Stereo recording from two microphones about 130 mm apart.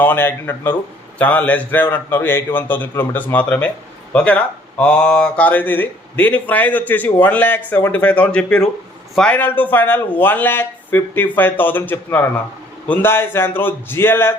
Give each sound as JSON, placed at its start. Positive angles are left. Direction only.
{"t": 0.0, "sound": "speech", "side_deg": 15}